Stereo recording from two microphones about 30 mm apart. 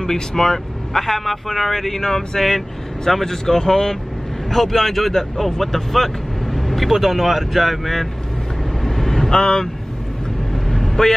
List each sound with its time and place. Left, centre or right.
0.0 s speech: centre
5.6 s vehicle: centre
6.9 s speech: centre
8.8 s vehicle: centre
9.3 s speech: left
10.5 s vehicle: centre